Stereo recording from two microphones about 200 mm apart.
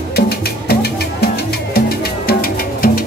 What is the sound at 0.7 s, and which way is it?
Music, 50° left (ahead or behind).